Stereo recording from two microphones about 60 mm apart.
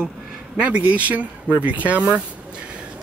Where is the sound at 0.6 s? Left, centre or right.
Right.